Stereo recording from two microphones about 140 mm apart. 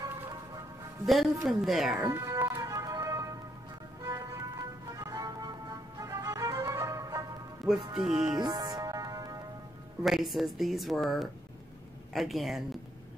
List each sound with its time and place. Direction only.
0.0 s music: 25° right (ahead or behind)
1.0 s speech: centre (ahead or behind)
2.0 s music: 20° right (ahead or behind)
7.9 s speech: 5° right (ahead or behind)
8.3 s music: 30° right (ahead or behind)
10.0 s speech: centre (ahead or behind)